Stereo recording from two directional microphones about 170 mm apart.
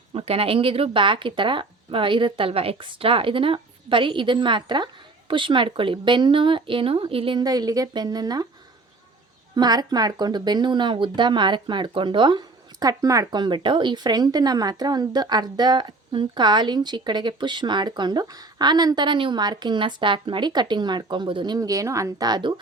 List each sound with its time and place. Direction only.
0.1 s speech: 35° right (ahead or behind)
9.6 s speech: 25° right (ahead or behind)